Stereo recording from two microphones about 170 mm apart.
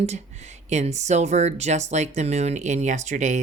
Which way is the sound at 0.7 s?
40° right (ahead or behind).